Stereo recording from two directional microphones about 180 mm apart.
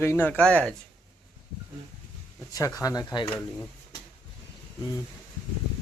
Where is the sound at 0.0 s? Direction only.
10° left (ahead or behind).